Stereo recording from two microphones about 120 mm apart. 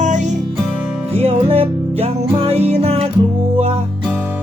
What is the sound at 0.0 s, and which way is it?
Music, 90° right.